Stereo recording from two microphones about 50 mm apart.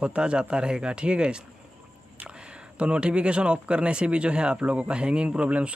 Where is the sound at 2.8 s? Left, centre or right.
Right.